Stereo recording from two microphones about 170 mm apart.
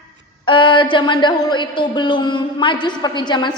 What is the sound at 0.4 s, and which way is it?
A woman's voice, 30° left (ahead or behind).